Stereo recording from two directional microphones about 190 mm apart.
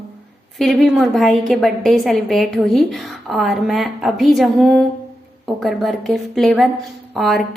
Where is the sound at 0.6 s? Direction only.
Centre (ahead or behind).